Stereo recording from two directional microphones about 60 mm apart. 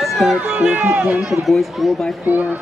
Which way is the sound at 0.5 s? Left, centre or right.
Right.